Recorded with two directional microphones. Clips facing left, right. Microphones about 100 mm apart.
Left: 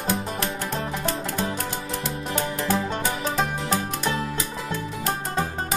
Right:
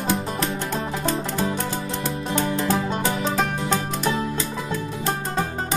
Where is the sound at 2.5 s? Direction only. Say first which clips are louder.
Right 2 dB; 30° right (ahead or behind).